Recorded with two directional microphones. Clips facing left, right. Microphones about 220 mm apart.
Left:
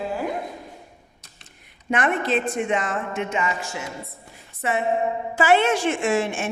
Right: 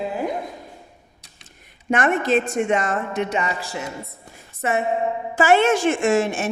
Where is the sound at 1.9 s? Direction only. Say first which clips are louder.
Right 3 dB; 45° right (ahead or behind).